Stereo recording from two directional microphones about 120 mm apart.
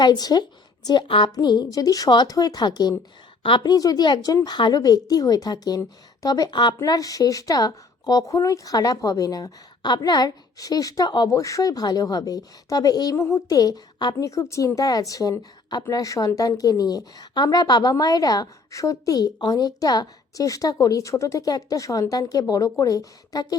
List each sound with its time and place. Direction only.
0.0 s a woman's voice: 35° left (ahead or behind)